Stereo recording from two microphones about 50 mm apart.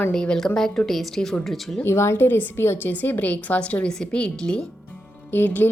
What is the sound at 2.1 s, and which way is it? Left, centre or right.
A woman's voice, left.